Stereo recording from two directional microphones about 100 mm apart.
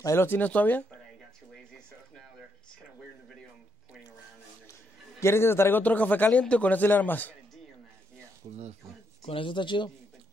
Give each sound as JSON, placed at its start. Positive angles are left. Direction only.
{"t": 0.0, "sound": "speech", "side_deg": 25}
{"t": 5.2, "sound": "a man's voice", "side_deg": 25}
{"t": 8.4, "sound": "speech", "side_deg": -75}
{"t": 9.2, "sound": "speech", "side_deg": 65}